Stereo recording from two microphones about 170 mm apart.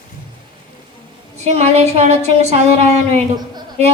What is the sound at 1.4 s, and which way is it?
A woman's voice, 40° right (ahead or behind).